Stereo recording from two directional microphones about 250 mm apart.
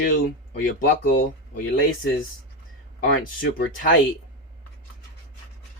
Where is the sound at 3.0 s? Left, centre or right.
Left.